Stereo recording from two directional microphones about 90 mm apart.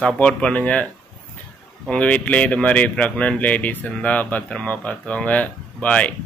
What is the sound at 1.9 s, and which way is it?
Speech, 15° left (ahead or behind).